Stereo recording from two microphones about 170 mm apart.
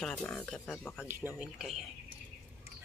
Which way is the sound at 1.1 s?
10° right (ahead or behind).